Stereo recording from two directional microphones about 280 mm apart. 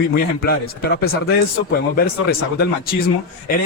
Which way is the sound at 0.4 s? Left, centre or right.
Left.